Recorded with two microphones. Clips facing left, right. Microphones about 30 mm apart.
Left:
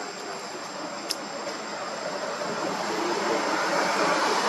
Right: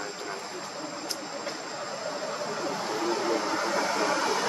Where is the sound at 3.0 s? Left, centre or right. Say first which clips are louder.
Left 1 dB; left.